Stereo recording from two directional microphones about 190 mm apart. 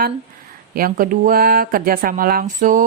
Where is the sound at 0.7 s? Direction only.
50° right (ahead or behind).